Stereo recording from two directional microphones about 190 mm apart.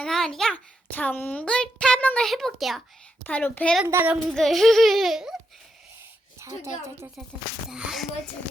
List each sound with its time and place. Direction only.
0.0 s a child's voice: 5° left (ahead or behind)
3.8 s a child's voice: 10° right (ahead or behind)
4.4 s a child's voice: centre (ahead or behind)
6.4 s a woman's voice: 15° right (ahead or behind)
7.7 s a child's voice: 5° right (ahead or behind)